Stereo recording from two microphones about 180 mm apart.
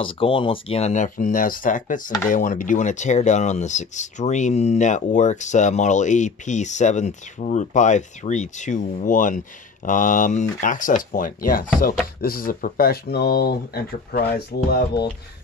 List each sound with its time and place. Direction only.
0.0 s speech: 30° left (ahead or behind); by 15.0 s 60° left (ahead or behind)